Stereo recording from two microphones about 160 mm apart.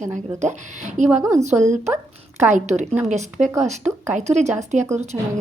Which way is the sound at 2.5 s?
50° right (ahead or behind).